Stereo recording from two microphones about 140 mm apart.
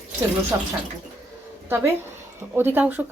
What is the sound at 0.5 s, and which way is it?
Speech, 20° right (ahead or behind).